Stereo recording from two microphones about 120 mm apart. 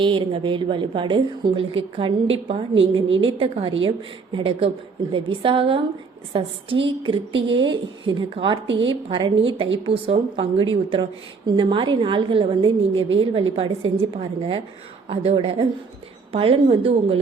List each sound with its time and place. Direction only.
0.0 s a woman's voice: 45° right (ahead or behind)